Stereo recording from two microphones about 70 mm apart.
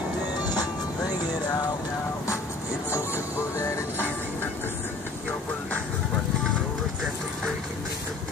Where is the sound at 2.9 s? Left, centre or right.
Left.